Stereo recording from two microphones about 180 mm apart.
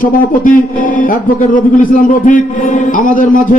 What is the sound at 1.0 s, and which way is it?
A man's voice, 50° left (ahead or behind).